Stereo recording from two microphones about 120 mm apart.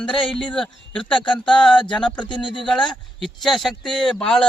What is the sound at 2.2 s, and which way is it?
Speech, 40° left (ahead or behind).